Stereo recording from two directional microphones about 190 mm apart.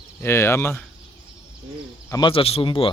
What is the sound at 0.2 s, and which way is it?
Speech, 10° left (ahead or behind).